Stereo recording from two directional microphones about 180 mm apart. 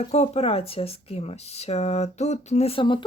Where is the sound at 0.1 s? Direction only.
35° left (ahead or behind).